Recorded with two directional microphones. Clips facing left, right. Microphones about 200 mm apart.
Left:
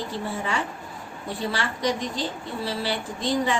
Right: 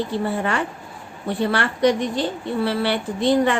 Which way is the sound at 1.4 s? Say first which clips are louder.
Right 8 dB; 60° right (ahead or behind).